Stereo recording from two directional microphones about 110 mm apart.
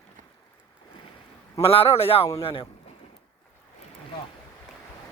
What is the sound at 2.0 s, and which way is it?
Speech, 60° left (ahead or behind).